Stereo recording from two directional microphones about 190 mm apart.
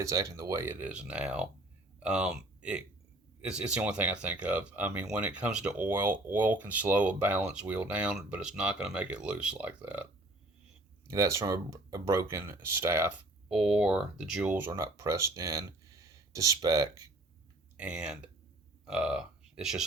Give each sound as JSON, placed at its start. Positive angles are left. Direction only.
{"t": 0.0, "sound": "speech", "side_deg": -15}
{"t": 11.1, "sound": "speech", "side_deg": -15}
{"t": 17.7, "sound": "speech", "side_deg": -5}